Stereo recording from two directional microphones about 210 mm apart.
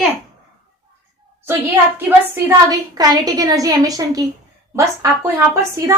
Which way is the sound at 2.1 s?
10° right (ahead or behind).